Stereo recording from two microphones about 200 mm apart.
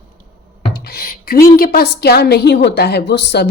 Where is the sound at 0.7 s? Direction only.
50° left (ahead or behind).